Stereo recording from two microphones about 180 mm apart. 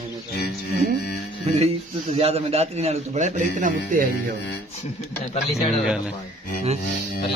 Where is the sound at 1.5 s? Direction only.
35° right (ahead or behind); by 4.3 s 50° right (ahead or behind).